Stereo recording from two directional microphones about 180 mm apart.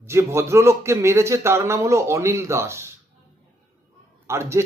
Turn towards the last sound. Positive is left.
turn(degrees=-15)  # may be behind; listen again after turning